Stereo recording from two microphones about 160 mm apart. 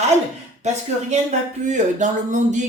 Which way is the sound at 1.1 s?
45° right (ahead or behind).